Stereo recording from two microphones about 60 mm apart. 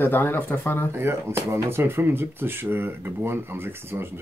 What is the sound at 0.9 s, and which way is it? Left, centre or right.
Speech, right.